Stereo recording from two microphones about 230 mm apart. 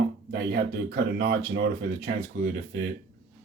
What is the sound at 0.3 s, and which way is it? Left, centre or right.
Speech, right.